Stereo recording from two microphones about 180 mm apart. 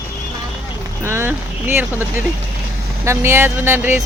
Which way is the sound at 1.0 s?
15° right (ahead or behind).